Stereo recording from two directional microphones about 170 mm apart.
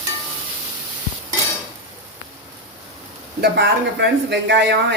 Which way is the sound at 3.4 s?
85° right.